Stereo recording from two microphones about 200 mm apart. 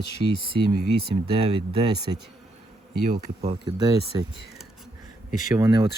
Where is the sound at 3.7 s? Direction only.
20° right (ahead or behind).